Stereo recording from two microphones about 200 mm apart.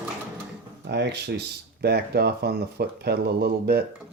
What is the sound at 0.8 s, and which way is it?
Speech, 60° right (ahead or behind).